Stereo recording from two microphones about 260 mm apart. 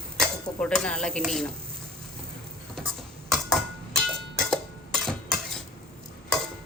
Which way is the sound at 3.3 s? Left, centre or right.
Centre.